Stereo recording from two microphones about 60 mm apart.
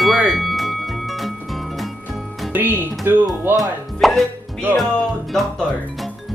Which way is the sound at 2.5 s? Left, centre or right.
Right.